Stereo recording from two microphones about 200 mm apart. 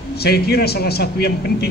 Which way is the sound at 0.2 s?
55° left (ahead or behind).